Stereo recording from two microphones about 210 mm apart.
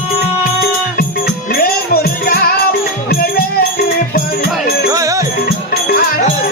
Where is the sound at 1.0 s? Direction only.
45° left (ahead or behind).